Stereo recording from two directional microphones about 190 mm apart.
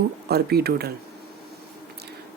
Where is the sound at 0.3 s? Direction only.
55° right (ahead or behind).